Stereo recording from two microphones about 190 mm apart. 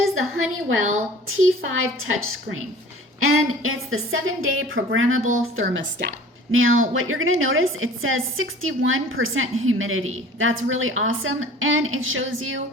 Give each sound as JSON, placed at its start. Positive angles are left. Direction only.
{"t": 0.1, "sound": "a woman's voice", "side_deg": -90}
{"t": 6.5, "sound": "a woman's voice", "side_deg": -90}